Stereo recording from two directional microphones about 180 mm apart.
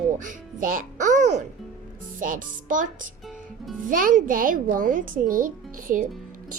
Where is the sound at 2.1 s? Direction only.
50° right (ahead or behind).